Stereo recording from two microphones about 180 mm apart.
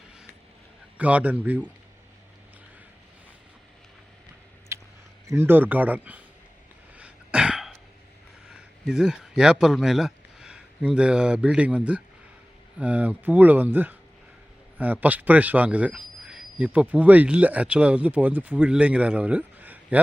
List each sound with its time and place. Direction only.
0.9 s a man's voice: 10° right (ahead or behind)
4.7 s a sound: 15° right (ahead or behind)
5.3 s a man's voice: 10° right (ahead or behind)
6.9 s throat clearing: 5° right (ahead or behind)
8.4 s a man's voice: 5° right (ahead or behind)